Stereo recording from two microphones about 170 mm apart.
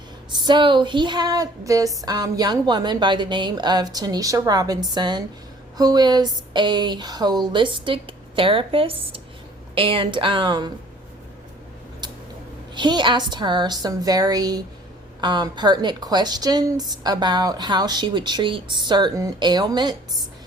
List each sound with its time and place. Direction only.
0.4 s a woman's voice: 30° right (ahead or behind)
12.7 s a woman's voice: 25° right (ahead or behind)